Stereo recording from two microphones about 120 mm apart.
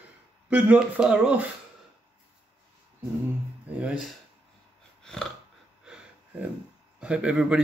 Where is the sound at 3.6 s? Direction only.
10° right (ahead or behind).